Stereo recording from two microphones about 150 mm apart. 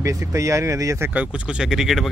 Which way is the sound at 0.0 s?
20° right (ahead or behind).